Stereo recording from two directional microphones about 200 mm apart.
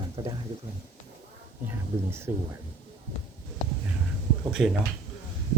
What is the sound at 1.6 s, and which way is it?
Speech, 10° right (ahead or behind).